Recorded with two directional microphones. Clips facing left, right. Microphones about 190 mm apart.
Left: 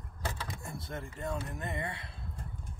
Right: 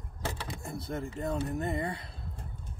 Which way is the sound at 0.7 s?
35° right (ahead or behind).